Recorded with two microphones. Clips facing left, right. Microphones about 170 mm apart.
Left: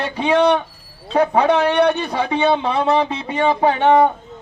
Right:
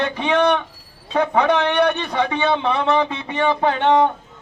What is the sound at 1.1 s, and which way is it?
A man's voice, 20° left (ahead or behind).